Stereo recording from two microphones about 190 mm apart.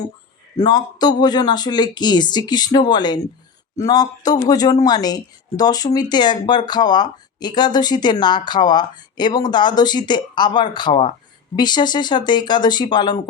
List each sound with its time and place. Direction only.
0.5 s speech: 20° left (ahead or behind)